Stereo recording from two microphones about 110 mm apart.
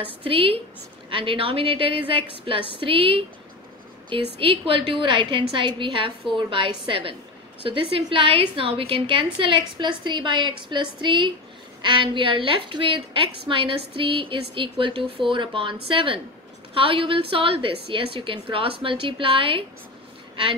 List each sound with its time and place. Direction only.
0.2 s a woman's voice: 55° right (ahead or behind)